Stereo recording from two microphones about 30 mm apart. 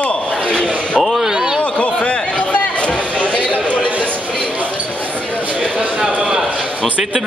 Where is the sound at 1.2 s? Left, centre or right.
Right.